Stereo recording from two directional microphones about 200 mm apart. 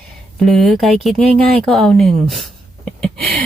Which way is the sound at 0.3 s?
Centre (ahead or behind).